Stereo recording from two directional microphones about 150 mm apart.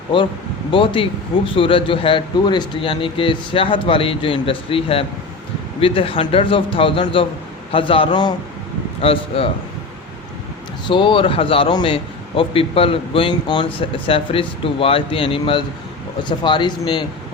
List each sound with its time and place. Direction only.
0.7 s a man's voice: 35° left (ahead or behind)
10.8 s a man's voice: 35° left (ahead or behind)